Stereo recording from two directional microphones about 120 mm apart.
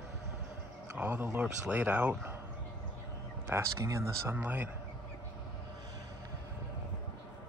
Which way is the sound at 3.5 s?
25° right (ahead or behind).